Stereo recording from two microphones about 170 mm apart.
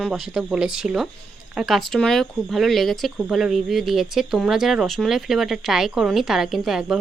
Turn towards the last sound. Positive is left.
turn(degrees=-5)  # may be behind; listen again after turning